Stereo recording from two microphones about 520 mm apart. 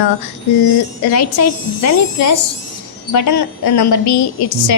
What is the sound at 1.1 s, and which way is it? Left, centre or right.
A woman's voice, left.